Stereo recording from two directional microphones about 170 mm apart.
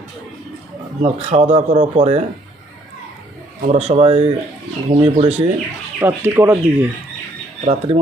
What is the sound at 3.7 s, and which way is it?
Speech, 40° right (ahead or behind).